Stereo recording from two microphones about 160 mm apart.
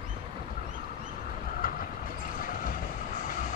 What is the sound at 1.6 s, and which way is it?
Train, 60° left (ahead or behind).